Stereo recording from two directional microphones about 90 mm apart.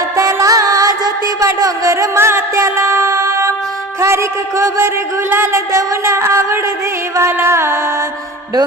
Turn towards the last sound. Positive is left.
turn(degrees=-30)  # may be behind; listen again after turning